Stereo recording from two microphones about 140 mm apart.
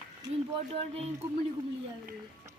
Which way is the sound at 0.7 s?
45° right (ahead or behind).